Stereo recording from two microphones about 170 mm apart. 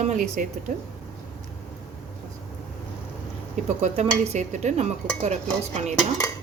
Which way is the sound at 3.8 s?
40° right (ahead or behind).